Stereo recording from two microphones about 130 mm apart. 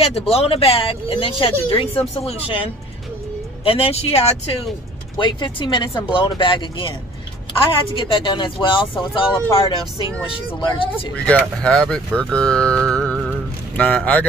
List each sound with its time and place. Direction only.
0.3 s speech: 50° left (ahead or behind)
5.2 s speech: 35° left (ahead or behind)
7.9 s speech: 35° left (ahead or behind)
11.2 s speech: 5° left (ahead or behind)
12.9 s music: 10° left (ahead or behind)
13.7 s speech: 10° left (ahead or behind)